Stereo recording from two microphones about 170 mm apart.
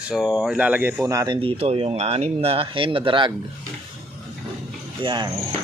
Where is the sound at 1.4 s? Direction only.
35° right (ahead or behind).